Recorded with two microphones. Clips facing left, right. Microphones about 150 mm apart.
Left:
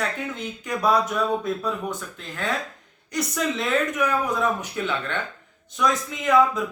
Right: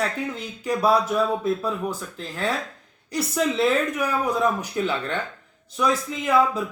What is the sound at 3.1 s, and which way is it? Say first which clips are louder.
Speech: right 3 dB; 30° right (ahead or behind).